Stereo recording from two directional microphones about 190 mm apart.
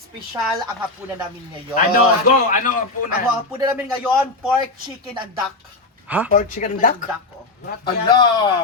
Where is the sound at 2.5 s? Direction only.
45° left (ahead or behind).